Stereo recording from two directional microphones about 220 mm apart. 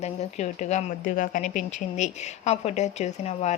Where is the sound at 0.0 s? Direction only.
30° left (ahead or behind).